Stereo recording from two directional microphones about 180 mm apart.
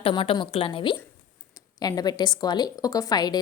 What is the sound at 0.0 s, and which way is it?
A woman's voice, 30° left (ahead or behind).